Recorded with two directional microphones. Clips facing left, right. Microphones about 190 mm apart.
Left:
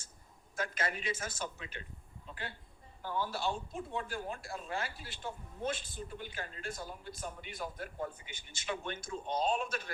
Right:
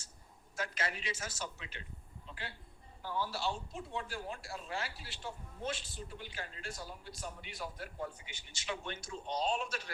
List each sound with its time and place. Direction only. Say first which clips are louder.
0.5 s a woman's voice: left 2 dB; 50° left (ahead or behind)